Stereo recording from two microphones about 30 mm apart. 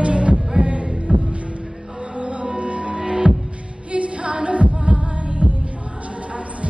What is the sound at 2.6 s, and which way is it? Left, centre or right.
Music, right.